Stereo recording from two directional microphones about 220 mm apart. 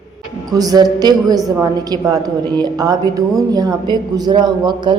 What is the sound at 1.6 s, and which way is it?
A woman's voice, 15° right (ahead or behind).